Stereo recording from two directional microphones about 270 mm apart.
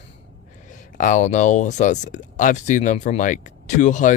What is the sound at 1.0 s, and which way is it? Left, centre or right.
Speech, left.